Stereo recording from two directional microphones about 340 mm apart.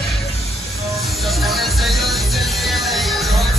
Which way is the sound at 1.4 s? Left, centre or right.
Centre.